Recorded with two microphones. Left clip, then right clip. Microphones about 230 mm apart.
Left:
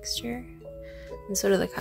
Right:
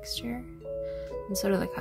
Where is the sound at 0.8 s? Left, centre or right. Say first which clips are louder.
Right 3 dB; centre.